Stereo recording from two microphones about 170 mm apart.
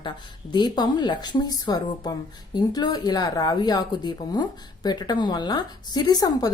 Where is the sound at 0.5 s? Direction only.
25° left (ahead or behind).